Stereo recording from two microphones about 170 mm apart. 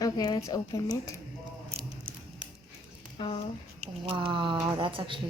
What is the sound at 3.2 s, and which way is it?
Speech, 30° left (ahead or behind).